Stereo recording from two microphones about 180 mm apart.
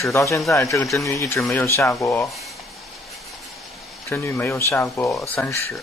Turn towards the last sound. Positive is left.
turn(degrees=10)  # may be behind; listen again after turning